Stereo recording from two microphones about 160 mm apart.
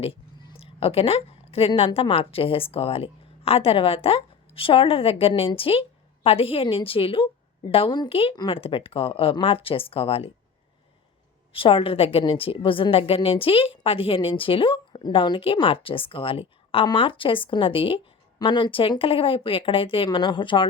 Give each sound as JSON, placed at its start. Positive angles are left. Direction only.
{"t": 0.0, "sound": "a woman's voice", "side_deg": 35}
{"t": 11.5, "sound": "a woman's voice", "side_deg": 35}